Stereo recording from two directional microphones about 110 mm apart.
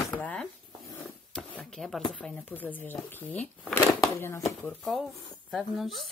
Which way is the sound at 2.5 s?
15° left (ahead or behind).